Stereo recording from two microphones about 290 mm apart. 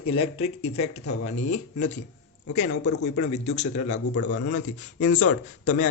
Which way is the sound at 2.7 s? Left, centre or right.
Left.